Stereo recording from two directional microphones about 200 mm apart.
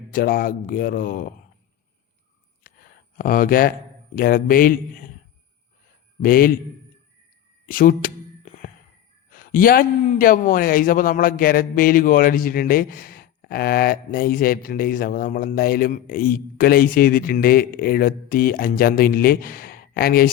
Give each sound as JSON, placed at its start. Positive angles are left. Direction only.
{"t": 0.1, "sound": "a man's voice", "side_deg": 45}
{"t": 2.6, "sound": "a sound", "side_deg": 45}
{"t": 3.2, "sound": "a man's voice", "side_deg": 45}
{"t": 6.2, "sound": "a man's voice", "side_deg": 45}
{"t": 7.7, "sound": "a sound", "side_deg": 45}
{"t": 9.3, "sound": "a man's voice", "side_deg": 45}